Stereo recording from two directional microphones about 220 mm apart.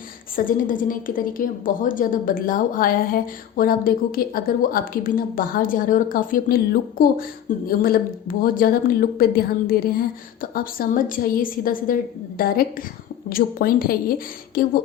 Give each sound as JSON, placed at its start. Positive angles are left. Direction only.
{"t": 0.3, "sound": "a woman's voice", "side_deg": 40}